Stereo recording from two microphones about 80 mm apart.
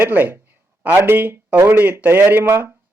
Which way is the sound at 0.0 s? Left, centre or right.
Right.